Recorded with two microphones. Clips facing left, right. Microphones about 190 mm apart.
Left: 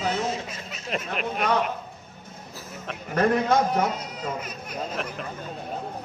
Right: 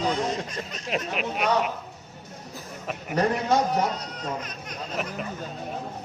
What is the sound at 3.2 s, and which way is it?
Speech, 55° left (ahead or behind).